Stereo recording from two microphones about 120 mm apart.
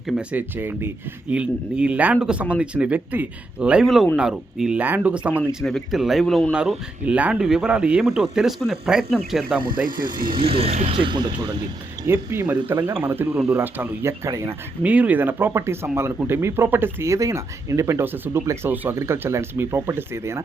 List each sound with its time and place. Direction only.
0.1 s speech: 10° right (ahead or behind)
6.5 s speech: 5° right (ahead or behind)
9.6 s speech: 40° right (ahead or behind)
12.0 s speech: 20° right (ahead or behind)
14.8 s speech: 10° right (ahead or behind)